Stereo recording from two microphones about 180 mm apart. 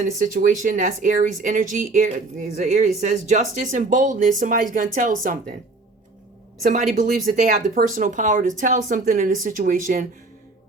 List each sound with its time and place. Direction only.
0.4 s speech: 50° right (ahead or behind)
6.6 s speech: 50° right (ahead or behind)
7.8 s speech: 50° right (ahead or behind)